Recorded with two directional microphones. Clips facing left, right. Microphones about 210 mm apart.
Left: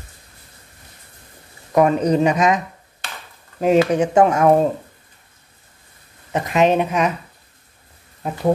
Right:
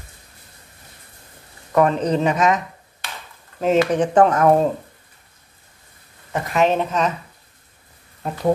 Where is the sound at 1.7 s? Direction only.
10° left (ahead or behind).